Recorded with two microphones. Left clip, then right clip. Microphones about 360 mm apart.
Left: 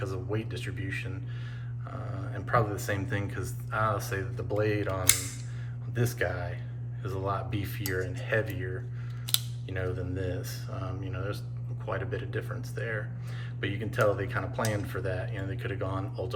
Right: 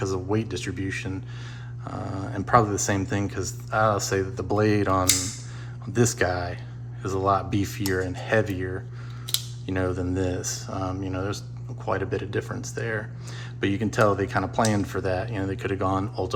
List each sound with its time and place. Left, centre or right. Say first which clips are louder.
0.0 s speech: right 8 dB; centre
9.6 s speech: right 8 dB; centre